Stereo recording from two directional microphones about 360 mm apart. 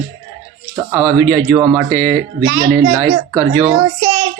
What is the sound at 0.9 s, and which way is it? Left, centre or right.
Speech, centre.